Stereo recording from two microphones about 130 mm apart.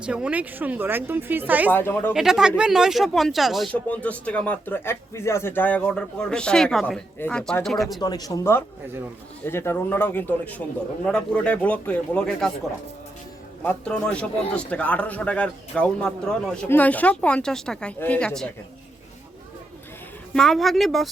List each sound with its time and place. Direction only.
0.0 s a woman's voice: 10° right (ahead or behind)
1.7 s speech: 15° left (ahead or behind)
2.1 s speech: 5° right (ahead or behind)
3.7 s speech: 10° left (ahead or behind)
8.0 s speech: 30° left (ahead or behind); by 12.5 s 5° left (ahead or behind)
13.7 s speech: 5° left (ahead or behind)
20.3 s speech: centre (ahead or behind)